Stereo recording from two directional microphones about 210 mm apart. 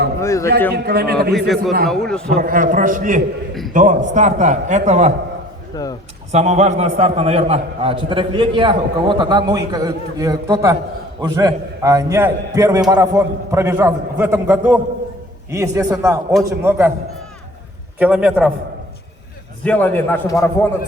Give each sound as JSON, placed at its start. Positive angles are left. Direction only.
{"t": 0.2, "sound": "a man's voice", "side_deg": 15}
{"t": 0.7, "sound": "a man's voice", "side_deg": -50}
{"t": 1.9, "sound": "a man's voice", "side_deg": 5}
{"t": 2.4, "sound": "a man's voice", "side_deg": -40}
{"t": 5.7, "sound": "a man's voice", "side_deg": 20}
{"t": 6.3, "sound": "a man's voice", "side_deg": -30}
{"t": 18.0, "sound": "a man's voice", "side_deg": -5}
{"t": 19.6, "sound": "a man's voice", "side_deg": 10}